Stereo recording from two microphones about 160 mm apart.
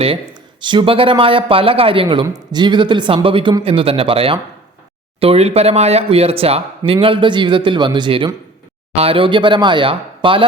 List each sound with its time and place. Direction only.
0.6 s speech: 30° right (ahead or behind)